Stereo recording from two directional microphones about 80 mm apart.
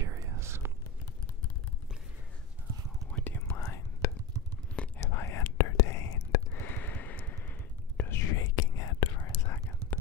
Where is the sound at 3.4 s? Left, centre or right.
Left.